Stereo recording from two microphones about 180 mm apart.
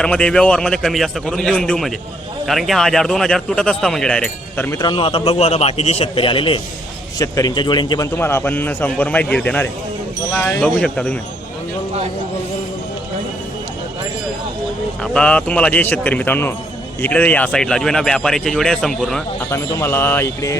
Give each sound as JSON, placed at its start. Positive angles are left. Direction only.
{"t": 0.0, "sound": "speech", "side_deg": 5}
{"t": 4.8, "sound": "a man's voice", "side_deg": 25}
{"t": 8.1, "sound": "a man's voice", "side_deg": 15}
{"t": 15.0, "sound": "a man's voice", "side_deg": 5}
{"t": 19.5, "sound": "a man's voice", "side_deg": 15}